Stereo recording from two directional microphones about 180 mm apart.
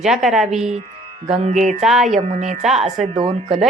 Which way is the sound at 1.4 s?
45° right (ahead or behind).